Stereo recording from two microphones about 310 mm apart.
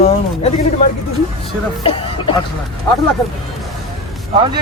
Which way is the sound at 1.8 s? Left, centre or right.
Centre.